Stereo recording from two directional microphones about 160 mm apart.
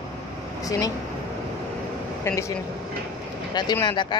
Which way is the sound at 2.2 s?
15° left (ahead or behind).